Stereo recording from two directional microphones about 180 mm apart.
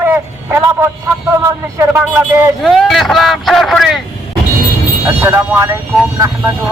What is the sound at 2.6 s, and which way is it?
Speech, centre (ahead or behind).